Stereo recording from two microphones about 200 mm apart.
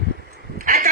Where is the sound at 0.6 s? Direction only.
40° right (ahead or behind).